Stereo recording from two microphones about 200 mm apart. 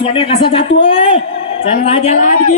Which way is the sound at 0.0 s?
30° left (ahead or behind).